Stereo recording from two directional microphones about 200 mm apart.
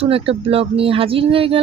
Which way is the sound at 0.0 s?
30° right (ahead or behind).